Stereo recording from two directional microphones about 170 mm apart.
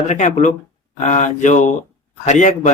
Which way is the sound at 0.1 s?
45° left (ahead or behind).